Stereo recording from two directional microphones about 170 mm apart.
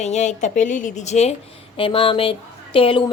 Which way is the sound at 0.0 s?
45° left (ahead or behind).